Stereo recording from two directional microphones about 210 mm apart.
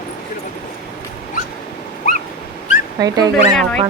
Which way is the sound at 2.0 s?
40° left (ahead or behind).